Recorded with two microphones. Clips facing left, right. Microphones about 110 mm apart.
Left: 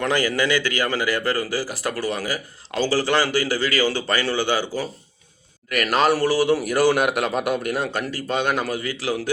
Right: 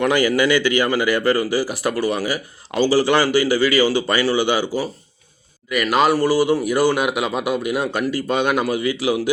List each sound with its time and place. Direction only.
0.0 s a man's voice: 15° right (ahead or behind)
5.7 s speech: centre (ahead or behind)